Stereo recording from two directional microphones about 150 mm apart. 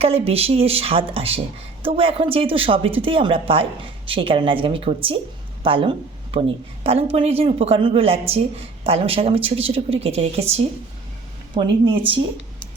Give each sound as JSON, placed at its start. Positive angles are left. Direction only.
{"t": 0.0, "sound": "a woman's voice", "side_deg": -40}